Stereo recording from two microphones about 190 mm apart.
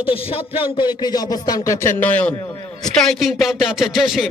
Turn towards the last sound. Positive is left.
turn(degrees=0)  # may be behind; listen again after turning